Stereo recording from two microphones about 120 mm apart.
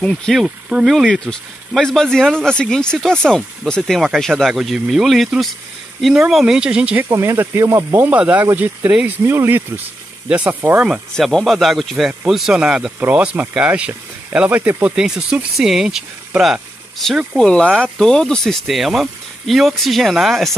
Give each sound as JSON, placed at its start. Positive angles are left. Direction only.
{"t": 0.0, "sound": "speech", "side_deg": 5}
{"t": 7.1, "sound": "speech", "side_deg": -25}
{"t": 11.1, "sound": "speech", "side_deg": 0}